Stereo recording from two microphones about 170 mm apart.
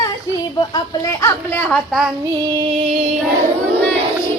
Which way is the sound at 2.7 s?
45° right (ahead or behind).